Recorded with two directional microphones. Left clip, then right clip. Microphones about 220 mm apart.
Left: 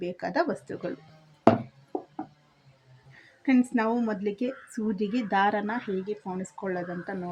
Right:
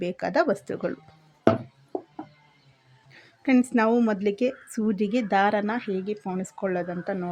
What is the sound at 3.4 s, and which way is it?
A woman's voice, 40° right (ahead or behind).